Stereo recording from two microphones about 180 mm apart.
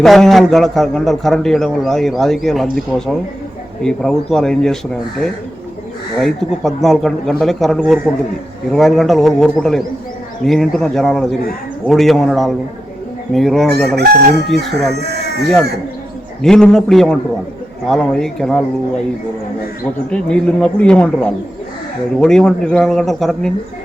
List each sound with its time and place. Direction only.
0.0 s a man's voice: centre (ahead or behind)
6.1 s a man's voice: centre (ahead or behind)
14.9 s speech: 65° right (ahead or behind)
16.4 s a man's voice: 5° left (ahead or behind)
20.1 s a man's voice: 5° left (ahead or behind)